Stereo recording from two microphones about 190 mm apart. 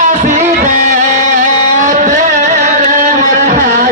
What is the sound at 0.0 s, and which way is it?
Music, 40° right (ahead or behind).